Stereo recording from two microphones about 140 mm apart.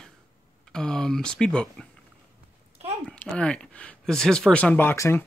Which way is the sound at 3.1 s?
10° left (ahead or behind).